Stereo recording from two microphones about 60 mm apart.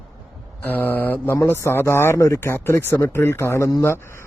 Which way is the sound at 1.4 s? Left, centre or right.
Left.